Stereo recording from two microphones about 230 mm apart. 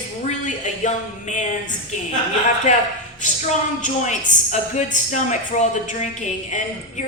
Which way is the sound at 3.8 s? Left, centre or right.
Left.